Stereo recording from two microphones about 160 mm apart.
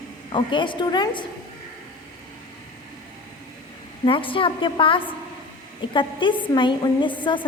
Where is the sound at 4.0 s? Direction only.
35° left (ahead or behind).